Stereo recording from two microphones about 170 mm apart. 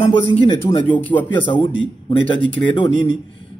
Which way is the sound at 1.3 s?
30° left (ahead or behind).